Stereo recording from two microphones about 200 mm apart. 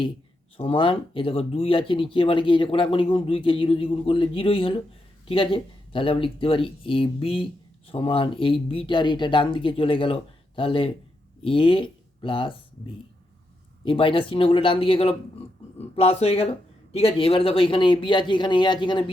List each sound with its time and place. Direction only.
0.5 s speech: 25° left (ahead or behind)
13.8 s speech: 25° left (ahead or behind)